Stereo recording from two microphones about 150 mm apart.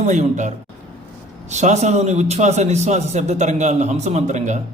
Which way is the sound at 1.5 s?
50° right (ahead or behind).